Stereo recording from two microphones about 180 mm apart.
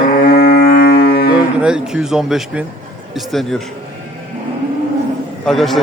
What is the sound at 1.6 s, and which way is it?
A man's voice, 5° right (ahead or behind).